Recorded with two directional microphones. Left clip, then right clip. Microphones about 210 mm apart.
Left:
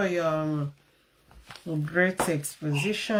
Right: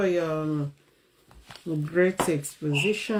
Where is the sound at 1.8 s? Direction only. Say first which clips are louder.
Right 1 dB; 5° left (ahead or behind).